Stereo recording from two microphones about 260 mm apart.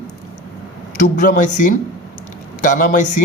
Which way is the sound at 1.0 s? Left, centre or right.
Left.